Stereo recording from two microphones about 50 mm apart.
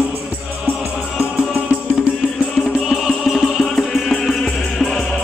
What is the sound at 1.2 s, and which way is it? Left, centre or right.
Music, right.